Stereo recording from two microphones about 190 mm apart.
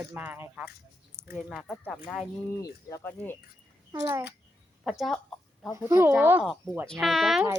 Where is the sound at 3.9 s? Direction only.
20° right (ahead or behind).